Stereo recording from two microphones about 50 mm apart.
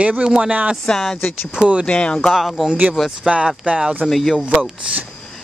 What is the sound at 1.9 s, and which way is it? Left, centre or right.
Speech, left.